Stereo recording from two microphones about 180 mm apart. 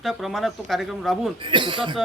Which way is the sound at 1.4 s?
25° right (ahead or behind).